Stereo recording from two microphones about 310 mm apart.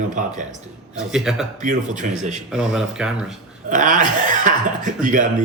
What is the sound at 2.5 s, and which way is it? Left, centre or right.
Speech, centre.